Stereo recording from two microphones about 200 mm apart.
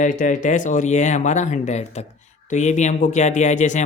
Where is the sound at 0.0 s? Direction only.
40° left (ahead or behind).